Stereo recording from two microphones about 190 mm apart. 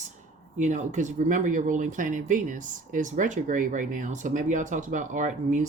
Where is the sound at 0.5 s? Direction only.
40° right (ahead or behind).